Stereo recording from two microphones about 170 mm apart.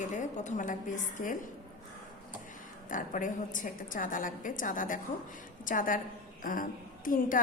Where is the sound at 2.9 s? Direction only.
50° left (ahead or behind).